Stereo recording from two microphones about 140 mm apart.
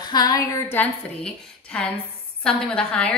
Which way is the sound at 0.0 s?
30° left (ahead or behind).